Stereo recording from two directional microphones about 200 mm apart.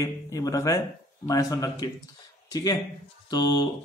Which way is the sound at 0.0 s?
15° left (ahead or behind).